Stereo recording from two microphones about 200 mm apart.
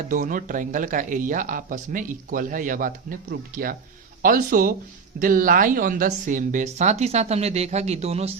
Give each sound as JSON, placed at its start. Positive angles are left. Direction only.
{"t": 0.1, "sound": "speech", "side_deg": -40}